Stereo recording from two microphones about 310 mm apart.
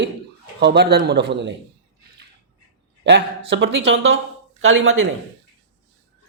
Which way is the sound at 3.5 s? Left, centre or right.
Right.